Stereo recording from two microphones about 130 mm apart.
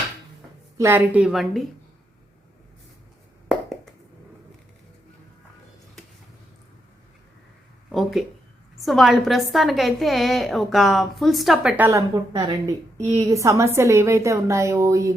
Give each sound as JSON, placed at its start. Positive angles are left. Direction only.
{"t": 0.8, "sound": "a woman's voice", "side_deg": -15}
{"t": 7.9, "sound": "a sound", "side_deg": 0}
{"t": 8.8, "sound": "a woman's voice", "side_deg": 0}
{"t": 11.8, "sound": "a woman's voice", "side_deg": -25}